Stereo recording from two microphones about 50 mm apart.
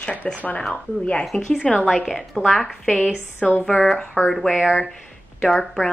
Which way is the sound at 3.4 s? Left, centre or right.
Centre.